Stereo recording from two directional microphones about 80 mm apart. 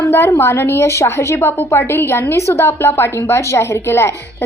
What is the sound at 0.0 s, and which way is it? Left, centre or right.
A woman's voice, left.